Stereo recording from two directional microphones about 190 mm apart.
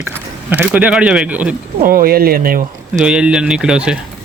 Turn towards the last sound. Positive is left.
turn(degrees=-5)  # may be behind; listen again after turning